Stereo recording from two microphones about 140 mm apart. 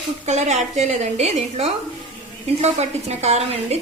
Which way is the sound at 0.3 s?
55° right (ahead or behind).